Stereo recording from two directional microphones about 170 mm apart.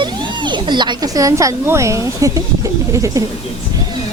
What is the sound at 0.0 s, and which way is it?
Speech, 25° right (ahead or behind).